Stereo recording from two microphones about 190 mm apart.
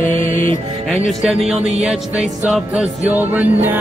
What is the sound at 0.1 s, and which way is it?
Music, 40° left (ahead or behind).